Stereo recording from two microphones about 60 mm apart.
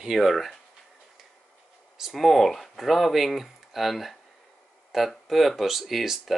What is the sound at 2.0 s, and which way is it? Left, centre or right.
Speech, centre.